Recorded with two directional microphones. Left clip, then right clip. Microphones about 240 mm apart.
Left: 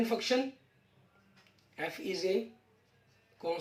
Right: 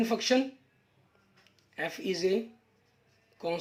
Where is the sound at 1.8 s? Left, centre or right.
Right.